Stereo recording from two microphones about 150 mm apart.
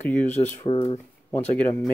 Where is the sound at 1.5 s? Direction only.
10° left (ahead or behind).